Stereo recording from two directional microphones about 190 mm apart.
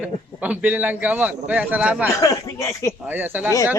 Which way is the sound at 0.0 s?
10° right (ahead or behind).